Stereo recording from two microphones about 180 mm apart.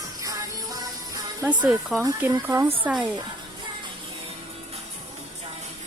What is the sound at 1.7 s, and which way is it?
Speech, centre (ahead or behind).